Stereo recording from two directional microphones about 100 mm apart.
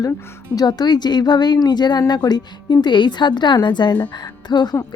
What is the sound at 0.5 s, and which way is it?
Speech, 45° left (ahead or behind).